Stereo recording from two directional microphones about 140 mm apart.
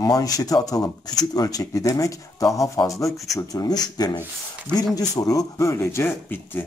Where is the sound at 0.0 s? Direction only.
25° left (ahead or behind).